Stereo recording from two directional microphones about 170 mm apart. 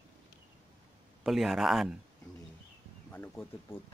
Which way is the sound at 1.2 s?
Centre (ahead or behind).